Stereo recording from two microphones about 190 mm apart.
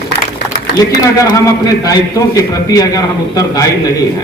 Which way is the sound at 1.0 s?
15° left (ahead or behind).